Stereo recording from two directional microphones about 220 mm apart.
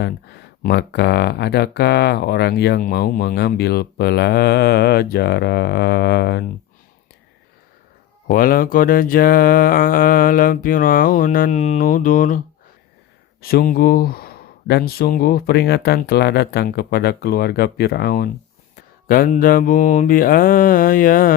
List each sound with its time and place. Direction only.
0.6 s speech: 45° left (ahead or behind)
8.3 s mantra: 40° left (ahead or behind)
13.4 s speech: 45° left (ahead or behind)
19.0 s mantra: 40° left (ahead or behind)